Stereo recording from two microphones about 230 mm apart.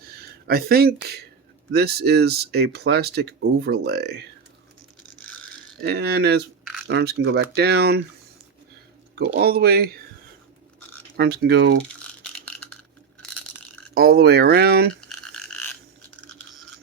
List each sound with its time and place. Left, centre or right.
0.2 s speech: right
5.8 s speech: right
9.1 s speech: right
11.2 s speech: right
13.9 s speech: right
15.3 s a sound: centre